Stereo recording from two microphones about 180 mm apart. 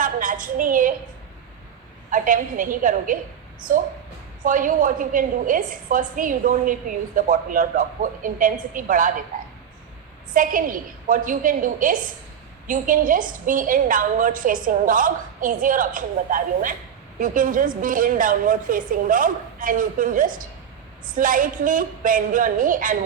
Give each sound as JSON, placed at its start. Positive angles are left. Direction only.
{"t": 0.0, "sound": "a sound", "side_deg": -50}
{"t": 2.0, "sound": "a woman's voice", "side_deg": -45}
{"t": 4.4, "sound": "a woman's voice", "side_deg": -45}
{"t": 10.3, "sound": "a woman's voice", "side_deg": -50}